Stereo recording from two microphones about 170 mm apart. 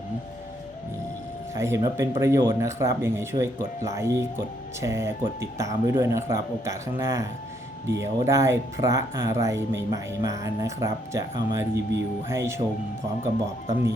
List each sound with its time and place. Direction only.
1.5 s speech: 15° right (ahead or behind)